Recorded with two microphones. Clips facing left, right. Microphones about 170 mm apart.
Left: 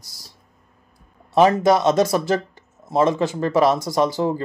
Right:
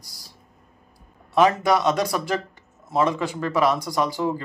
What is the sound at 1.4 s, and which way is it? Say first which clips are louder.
Speech: left 3 dB; 35° left (ahead or behind).